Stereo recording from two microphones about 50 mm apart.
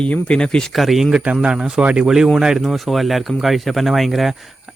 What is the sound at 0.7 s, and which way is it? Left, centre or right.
Speech, centre.